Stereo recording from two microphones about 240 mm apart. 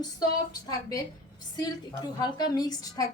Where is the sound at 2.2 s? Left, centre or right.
Centre.